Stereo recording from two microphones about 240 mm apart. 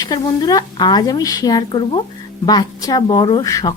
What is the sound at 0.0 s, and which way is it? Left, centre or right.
A woman's voice, centre.